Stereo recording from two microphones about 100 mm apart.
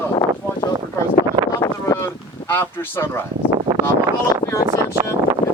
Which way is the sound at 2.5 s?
20° left (ahead or behind).